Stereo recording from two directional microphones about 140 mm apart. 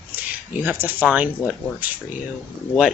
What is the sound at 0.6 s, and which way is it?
Speech, 15° right (ahead or behind).